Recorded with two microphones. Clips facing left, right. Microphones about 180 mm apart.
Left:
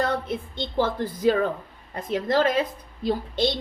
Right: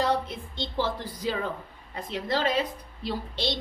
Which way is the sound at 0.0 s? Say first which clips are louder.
Left 1 dB; 55° left (ahead or behind).